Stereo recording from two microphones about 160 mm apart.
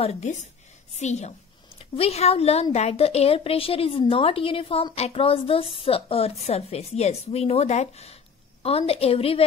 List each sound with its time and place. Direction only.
0.0 s a woman's voice: 45° left (ahead or behind)